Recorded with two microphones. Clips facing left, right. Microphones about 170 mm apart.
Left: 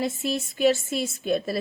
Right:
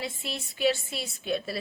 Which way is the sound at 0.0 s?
45° left (ahead or behind).